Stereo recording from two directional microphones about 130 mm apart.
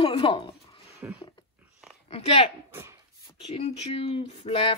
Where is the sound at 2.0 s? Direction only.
50° left (ahead or behind).